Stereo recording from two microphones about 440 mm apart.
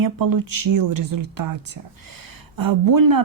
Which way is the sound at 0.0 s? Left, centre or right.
Right.